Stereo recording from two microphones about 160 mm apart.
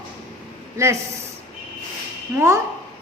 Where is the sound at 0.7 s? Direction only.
15° right (ahead or behind).